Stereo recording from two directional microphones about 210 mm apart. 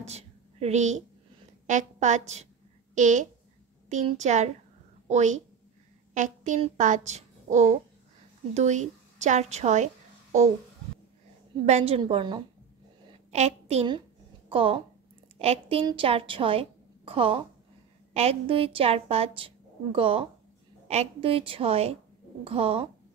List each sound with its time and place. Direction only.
0.0 s a sound: 30° right (ahead or behind)
1.7 s a woman's voice: 35° right (ahead or behind)
11.6 s a woman's voice: 30° right (ahead or behind)